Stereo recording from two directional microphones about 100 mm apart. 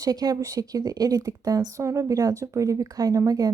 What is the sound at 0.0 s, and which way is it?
Speech, 40° right (ahead or behind).